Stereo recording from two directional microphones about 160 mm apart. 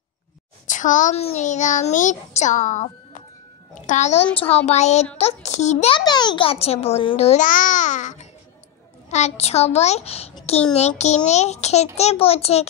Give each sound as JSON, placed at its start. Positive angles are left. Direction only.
{"t": 0.7, "sound": "a woman's voice", "side_deg": 55}
{"t": 5.9, "sound": "a child's voice", "side_deg": 25}